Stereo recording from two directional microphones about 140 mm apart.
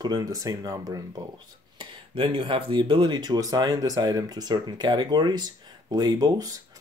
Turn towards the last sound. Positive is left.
turn(degrees=-25)  # may be behind; listen again after turning